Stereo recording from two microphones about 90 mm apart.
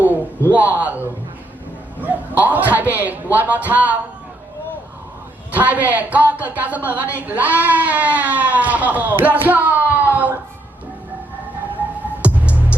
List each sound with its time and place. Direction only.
0.5 s a woman's voice: 20° right (ahead or behind)
5.5 s a woman's voice: 20° right (ahead or behind)
12.2 s music: 15° right (ahead or behind)